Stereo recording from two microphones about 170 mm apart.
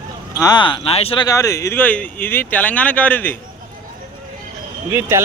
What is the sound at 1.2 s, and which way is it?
Speech, 20° left (ahead or behind).